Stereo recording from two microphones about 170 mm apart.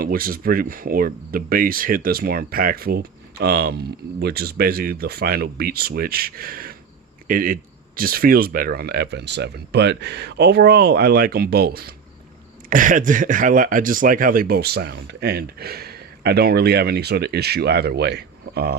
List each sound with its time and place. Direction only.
0.0 s speech: 60° right (ahead or behind)
12.7 s speech: 50° right (ahead or behind); by 18.8 s 70° right (ahead or behind)